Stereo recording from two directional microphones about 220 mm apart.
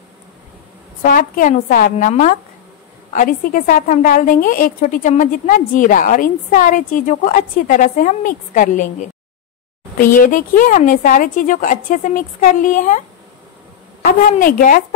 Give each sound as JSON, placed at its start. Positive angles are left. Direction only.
{"t": 1.0, "sound": "a woman's voice", "side_deg": 40}
{"t": 14.4, "sound": "a woman's voice", "side_deg": 40}